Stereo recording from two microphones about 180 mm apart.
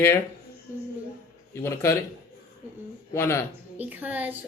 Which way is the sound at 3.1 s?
15° left (ahead or behind).